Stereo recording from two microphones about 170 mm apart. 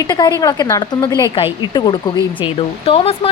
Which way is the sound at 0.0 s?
25° left (ahead or behind).